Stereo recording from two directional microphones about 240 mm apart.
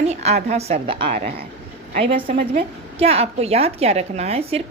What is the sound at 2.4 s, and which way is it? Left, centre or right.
Speech, right.